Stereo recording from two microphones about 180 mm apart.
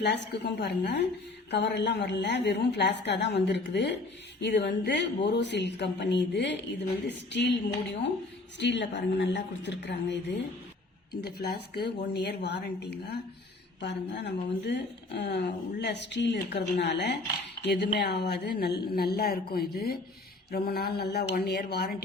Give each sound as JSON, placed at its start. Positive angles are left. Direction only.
{"t": 0.0, "sound": "speech", "side_deg": 70}
{"t": 8.5, "sound": "speech", "side_deg": 70}
{"t": 11.2, "sound": "speech", "side_deg": 60}